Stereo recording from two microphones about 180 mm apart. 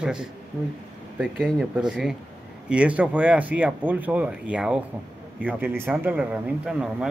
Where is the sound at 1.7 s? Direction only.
5° right (ahead or behind).